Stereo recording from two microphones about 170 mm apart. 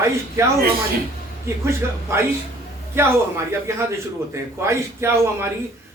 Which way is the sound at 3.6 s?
15° right (ahead or behind).